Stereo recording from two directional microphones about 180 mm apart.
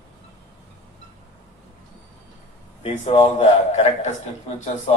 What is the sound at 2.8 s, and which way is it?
A man's voice, 35° left (ahead or behind).